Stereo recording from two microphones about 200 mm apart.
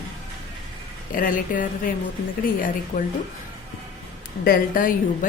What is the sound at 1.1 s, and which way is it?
A woman's voice, 45° left (ahead or behind).